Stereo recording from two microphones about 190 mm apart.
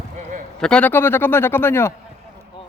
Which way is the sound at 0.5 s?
5° left (ahead or behind).